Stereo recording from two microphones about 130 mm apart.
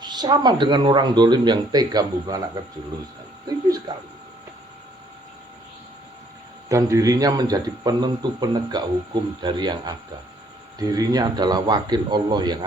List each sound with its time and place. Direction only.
0.0 s a man's voice: 35° right (ahead or behind)
6.7 s a man's voice: 25° right (ahead or behind)